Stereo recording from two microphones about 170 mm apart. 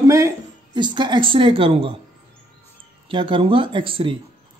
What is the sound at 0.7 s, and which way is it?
A woman's voice, 25° right (ahead or behind).